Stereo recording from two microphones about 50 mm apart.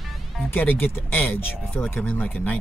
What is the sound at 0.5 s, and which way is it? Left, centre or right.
Speech, left.